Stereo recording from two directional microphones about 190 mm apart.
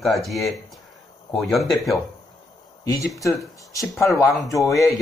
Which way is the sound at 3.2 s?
15° left (ahead or behind).